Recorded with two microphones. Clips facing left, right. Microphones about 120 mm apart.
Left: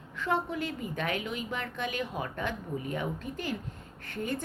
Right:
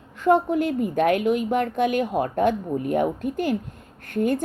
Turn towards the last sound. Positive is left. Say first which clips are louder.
# right 11 dB
turn(degrees=-55)  # may be behind; listen again after turning